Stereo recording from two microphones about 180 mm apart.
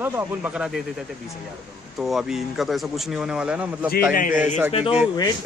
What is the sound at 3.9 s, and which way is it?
Speech, 50° left (ahead or behind).